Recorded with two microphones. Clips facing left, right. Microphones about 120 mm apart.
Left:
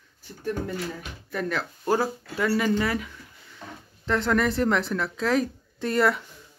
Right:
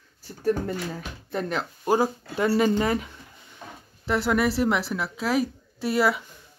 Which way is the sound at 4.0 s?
10° right (ahead or behind).